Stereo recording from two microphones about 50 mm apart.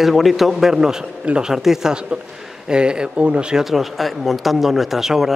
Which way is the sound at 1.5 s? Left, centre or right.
Centre.